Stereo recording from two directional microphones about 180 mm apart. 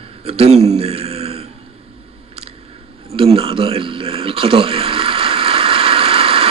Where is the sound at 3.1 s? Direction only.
30° right (ahead or behind).